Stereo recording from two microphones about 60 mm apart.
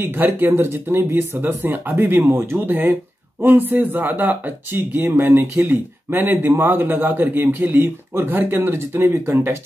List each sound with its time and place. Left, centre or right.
0.0 s speech: right